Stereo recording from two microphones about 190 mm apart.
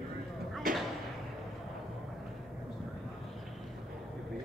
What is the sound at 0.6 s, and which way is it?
Thump, 45° right (ahead or behind).